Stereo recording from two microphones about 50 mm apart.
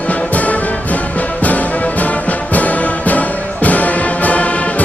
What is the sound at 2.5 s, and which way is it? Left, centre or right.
Music, left.